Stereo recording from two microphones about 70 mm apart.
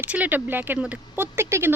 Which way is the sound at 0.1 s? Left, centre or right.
Right.